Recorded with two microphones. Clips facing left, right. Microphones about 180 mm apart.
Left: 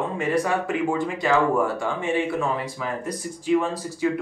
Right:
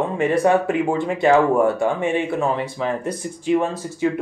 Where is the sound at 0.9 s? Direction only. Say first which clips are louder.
Right 7 dB; 25° right (ahead or behind).